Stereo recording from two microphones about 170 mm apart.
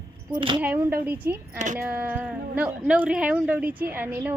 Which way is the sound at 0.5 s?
10° right (ahead or behind).